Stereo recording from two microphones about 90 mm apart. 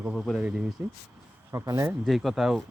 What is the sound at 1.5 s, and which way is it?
Speech, 35° right (ahead or behind).